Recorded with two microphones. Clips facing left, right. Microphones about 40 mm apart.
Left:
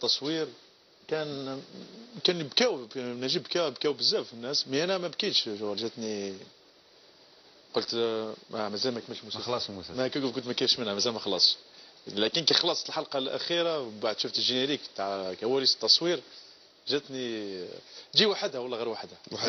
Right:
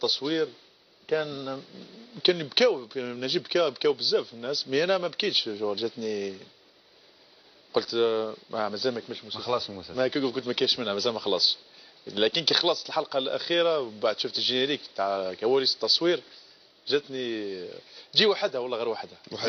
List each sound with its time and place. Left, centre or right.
0.0 s speech: centre
7.7 s speech: centre
12.4 s speech: centre
16.0 s speech: centre
16.8 s speech: centre